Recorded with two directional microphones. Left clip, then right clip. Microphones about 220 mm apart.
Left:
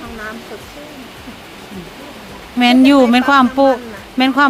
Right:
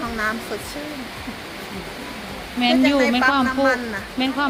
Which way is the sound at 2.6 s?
45° left (ahead or behind).